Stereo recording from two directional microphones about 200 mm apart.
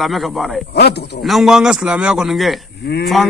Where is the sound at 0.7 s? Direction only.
55° left (ahead or behind).